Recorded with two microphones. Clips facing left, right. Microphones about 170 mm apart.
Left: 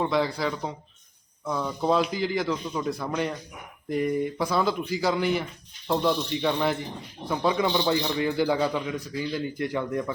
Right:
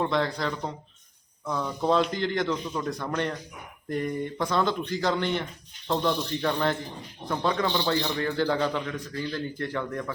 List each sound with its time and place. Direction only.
0.0 s a man's voice: 5° left (ahead or behind)